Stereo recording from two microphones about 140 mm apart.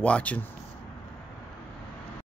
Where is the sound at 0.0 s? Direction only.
10° left (ahead or behind).